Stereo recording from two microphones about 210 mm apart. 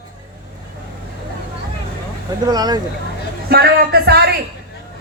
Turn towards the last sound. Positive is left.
turn(degrees=-50)  # may be behind; listen again after turning